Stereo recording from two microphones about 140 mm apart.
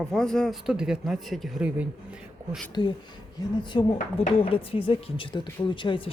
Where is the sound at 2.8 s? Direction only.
35° left (ahead or behind).